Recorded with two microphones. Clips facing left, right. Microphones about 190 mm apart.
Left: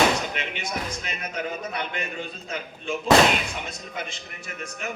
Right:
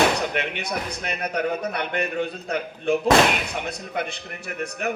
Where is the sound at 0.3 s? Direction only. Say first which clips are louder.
Right 4 dB; 60° right (ahead or behind).